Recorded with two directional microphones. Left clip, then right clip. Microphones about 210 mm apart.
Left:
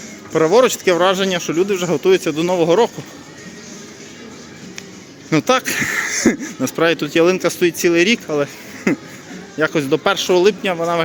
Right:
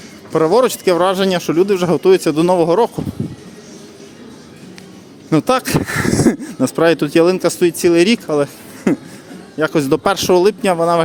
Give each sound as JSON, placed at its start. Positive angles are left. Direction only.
{"t": 0.3, "sound": "speech", "side_deg": -20}
{"t": 5.3, "sound": "speech", "side_deg": -20}